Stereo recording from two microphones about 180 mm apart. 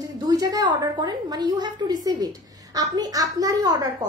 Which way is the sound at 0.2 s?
20° right (ahead or behind).